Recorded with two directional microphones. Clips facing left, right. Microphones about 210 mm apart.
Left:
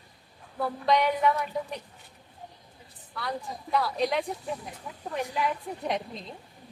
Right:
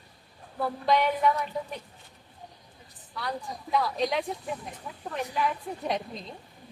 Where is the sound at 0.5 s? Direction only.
Centre (ahead or behind).